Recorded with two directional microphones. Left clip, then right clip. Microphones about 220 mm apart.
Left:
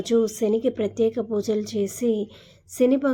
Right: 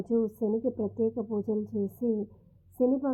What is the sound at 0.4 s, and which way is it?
Speech, 45° left (ahead or behind).